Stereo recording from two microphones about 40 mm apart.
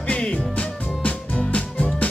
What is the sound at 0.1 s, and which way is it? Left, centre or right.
Music, left.